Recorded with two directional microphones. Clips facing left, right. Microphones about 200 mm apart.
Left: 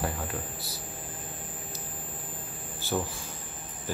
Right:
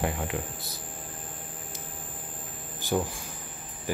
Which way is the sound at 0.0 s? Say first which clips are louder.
Right 3 dB; 20° right (ahead or behind).